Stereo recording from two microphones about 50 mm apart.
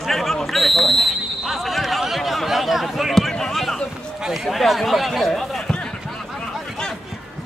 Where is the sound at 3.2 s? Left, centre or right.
Centre.